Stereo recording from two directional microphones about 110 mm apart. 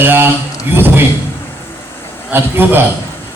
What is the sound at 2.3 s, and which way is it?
Speech, 20° right (ahead or behind).